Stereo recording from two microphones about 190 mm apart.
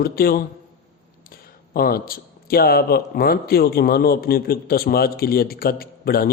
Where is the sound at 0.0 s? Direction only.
55° left (ahead or behind).